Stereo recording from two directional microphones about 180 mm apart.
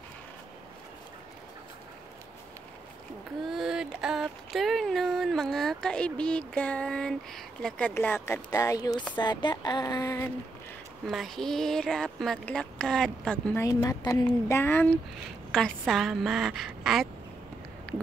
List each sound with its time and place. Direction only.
3.4 s a sound: centre (ahead or behind); by 9.0 s 20° left (ahead or behind)
9.1 s speech: 25° left (ahead or behind)
11.1 s speech: centre (ahead or behind)
13.7 s speech: 20° left (ahead or behind); by 17.1 s centre (ahead or behind)